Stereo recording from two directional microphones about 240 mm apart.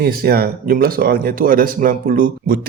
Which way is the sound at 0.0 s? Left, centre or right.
Right.